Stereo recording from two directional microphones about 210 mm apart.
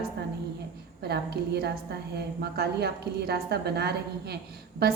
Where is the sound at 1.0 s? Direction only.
50° right (ahead or behind).